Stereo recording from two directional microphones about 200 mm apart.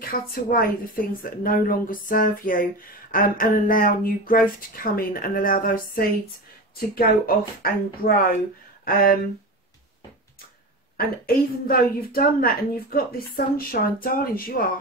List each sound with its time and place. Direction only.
0.0 s a woman's voice: 45° left (ahead or behind)
11.0 s a woman's voice: 45° left (ahead or behind)
14.0 s a woman's voice: 45° left (ahead or behind)